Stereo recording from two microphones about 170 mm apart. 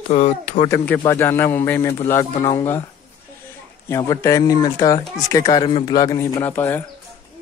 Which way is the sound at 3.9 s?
15° left (ahead or behind).